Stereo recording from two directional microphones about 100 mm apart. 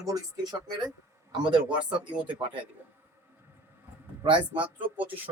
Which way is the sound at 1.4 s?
50° right (ahead or behind).